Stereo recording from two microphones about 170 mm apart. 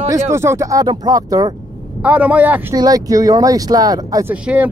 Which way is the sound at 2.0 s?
10° right (ahead or behind).